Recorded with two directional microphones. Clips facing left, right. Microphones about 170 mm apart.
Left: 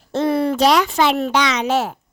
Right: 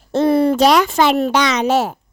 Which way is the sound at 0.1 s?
35° right (ahead or behind).